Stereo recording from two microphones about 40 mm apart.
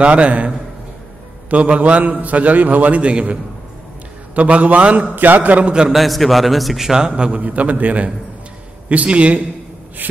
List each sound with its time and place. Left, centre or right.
0.0 s a man's voice: right
1.5 s a man's voice: right
3.0 s a man's voice: right
4.4 s a man's voice: right
4.9 s a man's voice: right
5.6 s a man's voice: right
5.9 s a man's voice: centre
6.9 s a man's voice: centre
7.3 s a man's voice: right